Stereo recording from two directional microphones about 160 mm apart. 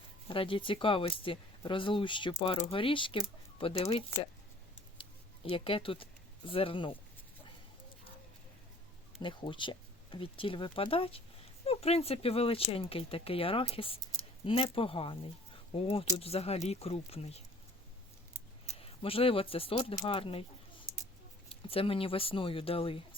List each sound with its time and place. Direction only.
0.3 s speech: 35° left (ahead or behind)
5.5 s speech: 35° left (ahead or behind)
9.2 s speech: 30° left (ahead or behind)
18.8 s speech: 35° left (ahead or behind)
21.5 s speech: 35° left (ahead or behind)